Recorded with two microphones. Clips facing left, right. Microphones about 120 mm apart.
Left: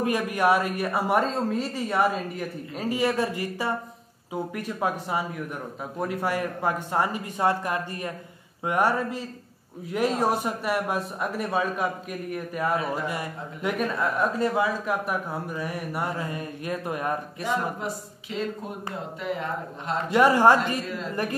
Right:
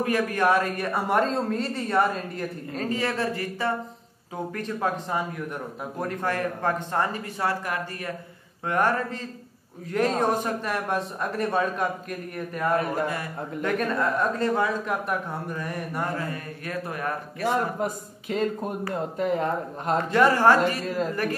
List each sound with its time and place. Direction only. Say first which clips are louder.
0.0 s a man's voice: even; 15° left (ahead or behind)
12.7 s speech: right 3 dB; 50° right (ahead or behind)
13.1 s a man's voice: right 1 dB; 15° left (ahead or behind)
17.4 s speech: right 7 dB; 45° right (ahead or behind)
20.1 s a man's voice: left 1 dB; 15° left (ahead or behind)